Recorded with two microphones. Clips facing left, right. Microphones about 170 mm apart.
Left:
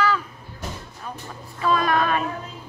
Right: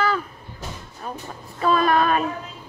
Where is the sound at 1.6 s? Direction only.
40° right (ahead or behind).